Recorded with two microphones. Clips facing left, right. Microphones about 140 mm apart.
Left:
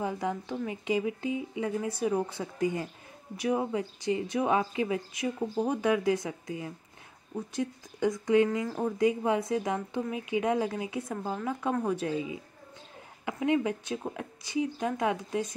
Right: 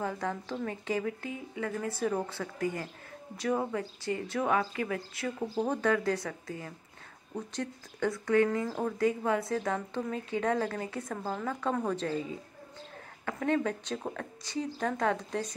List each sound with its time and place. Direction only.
0.0 s a woman's voice: 15° left (ahead or behind)